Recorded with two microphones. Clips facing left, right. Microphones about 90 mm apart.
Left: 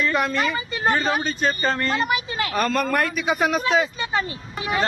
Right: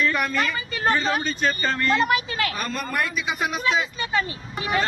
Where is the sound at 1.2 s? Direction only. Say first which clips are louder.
Left 1 dB; 35° left (ahead or behind).